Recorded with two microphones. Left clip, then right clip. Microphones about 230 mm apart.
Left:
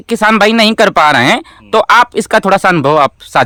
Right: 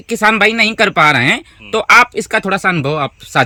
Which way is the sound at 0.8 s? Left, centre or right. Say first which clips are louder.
Left 2 dB; centre.